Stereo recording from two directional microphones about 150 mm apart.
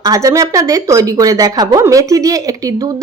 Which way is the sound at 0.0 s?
25° right (ahead or behind).